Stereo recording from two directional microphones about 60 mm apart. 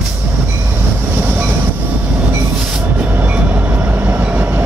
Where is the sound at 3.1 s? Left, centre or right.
Right.